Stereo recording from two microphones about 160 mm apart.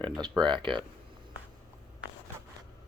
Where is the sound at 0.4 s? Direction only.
30° right (ahead or behind).